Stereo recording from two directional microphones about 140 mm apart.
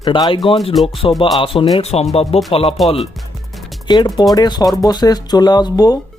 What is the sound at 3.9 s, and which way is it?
Speech, 30° left (ahead or behind).